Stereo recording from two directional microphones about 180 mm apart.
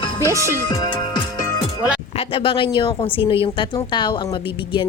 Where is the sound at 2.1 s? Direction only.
30° left (ahead or behind).